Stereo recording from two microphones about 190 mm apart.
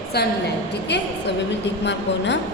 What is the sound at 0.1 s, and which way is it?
A woman's voice, 55° left (ahead or behind).